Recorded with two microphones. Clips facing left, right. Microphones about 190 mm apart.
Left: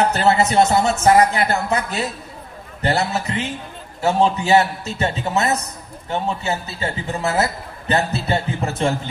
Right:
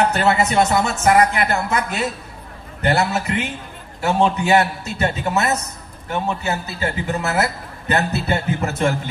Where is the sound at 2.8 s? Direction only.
35° left (ahead or behind).